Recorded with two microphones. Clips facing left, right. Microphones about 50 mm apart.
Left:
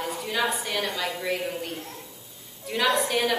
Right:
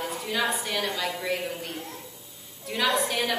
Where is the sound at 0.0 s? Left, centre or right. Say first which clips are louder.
Left 1 dB; centre.